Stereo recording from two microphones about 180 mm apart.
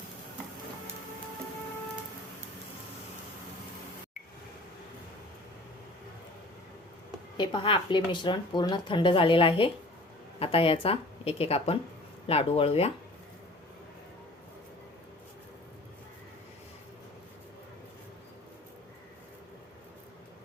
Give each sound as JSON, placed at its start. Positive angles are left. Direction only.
{"t": 7.3, "sound": "speech", "side_deg": 25}